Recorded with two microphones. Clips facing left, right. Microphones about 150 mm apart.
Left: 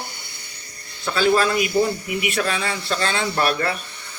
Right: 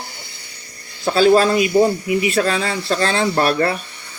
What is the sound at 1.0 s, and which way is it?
Speech, 30° right (ahead or behind).